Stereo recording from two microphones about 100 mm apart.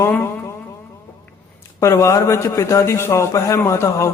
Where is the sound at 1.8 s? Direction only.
30° left (ahead or behind).